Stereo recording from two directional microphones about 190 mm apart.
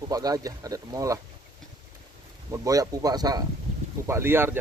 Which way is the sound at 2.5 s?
20° right (ahead or behind).